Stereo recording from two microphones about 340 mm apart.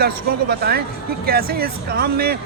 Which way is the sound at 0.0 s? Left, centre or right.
Right.